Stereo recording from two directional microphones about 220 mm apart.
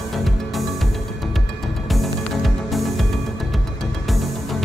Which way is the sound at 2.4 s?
Centre (ahead or behind).